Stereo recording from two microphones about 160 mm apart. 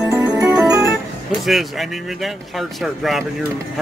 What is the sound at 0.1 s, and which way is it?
Music, 15° right (ahead or behind).